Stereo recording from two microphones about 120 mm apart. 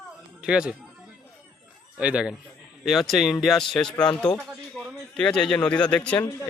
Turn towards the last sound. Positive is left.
turn(degrees=10)  # may be behind; listen again after turning